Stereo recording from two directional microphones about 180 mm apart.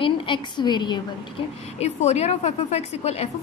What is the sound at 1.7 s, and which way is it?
A woman's voice, 35° left (ahead or behind).